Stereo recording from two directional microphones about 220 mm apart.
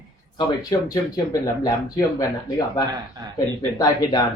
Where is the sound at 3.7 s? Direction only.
15° left (ahead or behind).